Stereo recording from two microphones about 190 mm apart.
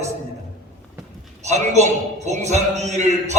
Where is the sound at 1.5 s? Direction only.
35° right (ahead or behind).